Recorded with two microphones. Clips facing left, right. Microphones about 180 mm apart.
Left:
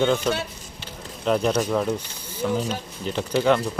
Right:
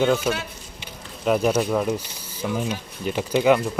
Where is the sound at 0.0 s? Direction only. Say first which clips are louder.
Right 1 dB; 10° right (ahead or behind).